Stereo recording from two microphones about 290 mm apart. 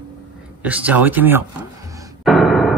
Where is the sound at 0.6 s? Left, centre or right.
Centre.